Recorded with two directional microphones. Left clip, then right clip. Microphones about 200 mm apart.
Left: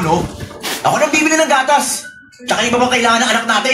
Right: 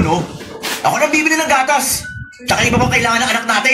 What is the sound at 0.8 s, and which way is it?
Speech, 35° right (ahead or behind).